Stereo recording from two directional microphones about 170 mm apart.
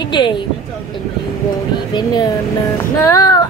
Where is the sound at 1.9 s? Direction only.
25° left (ahead or behind).